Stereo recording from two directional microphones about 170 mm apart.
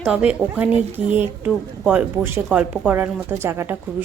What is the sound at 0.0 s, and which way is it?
Speech, 5° right (ahead or behind).